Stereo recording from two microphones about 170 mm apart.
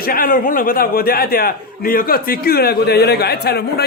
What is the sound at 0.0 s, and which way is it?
A man's voice, 60° left (ahead or behind).